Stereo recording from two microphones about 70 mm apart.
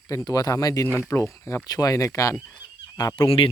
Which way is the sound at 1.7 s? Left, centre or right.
Left.